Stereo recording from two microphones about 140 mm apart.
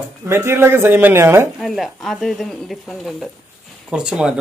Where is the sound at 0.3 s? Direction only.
15° right (ahead or behind).